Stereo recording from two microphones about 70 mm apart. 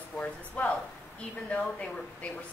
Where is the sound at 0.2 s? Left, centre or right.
Left.